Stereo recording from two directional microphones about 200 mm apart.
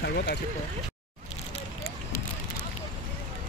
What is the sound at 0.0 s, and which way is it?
Speech, 55° left (ahead or behind).